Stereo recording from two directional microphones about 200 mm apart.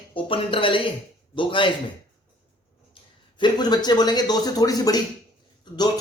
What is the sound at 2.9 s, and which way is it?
A man's voice, 25° left (ahead or behind).